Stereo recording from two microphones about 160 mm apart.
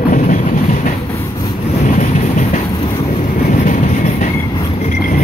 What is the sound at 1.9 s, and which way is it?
Train, 55° left (ahead or behind).